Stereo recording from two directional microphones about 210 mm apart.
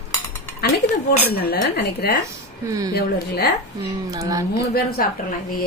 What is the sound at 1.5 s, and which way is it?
Speech, 50° left (ahead or behind).